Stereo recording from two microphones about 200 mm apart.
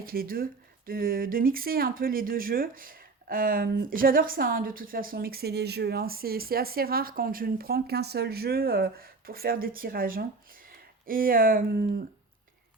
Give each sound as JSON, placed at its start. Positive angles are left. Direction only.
{"t": 0.0, "sound": "speech", "side_deg": -45}